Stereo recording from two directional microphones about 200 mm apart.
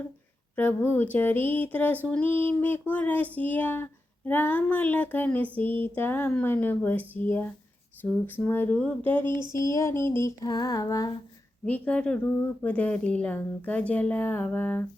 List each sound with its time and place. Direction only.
0.5 s speech: 10° left (ahead or behind)
11.6 s speech: 5° left (ahead or behind)